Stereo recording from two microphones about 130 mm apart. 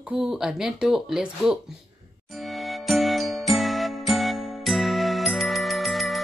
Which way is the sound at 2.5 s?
Centre (ahead or behind).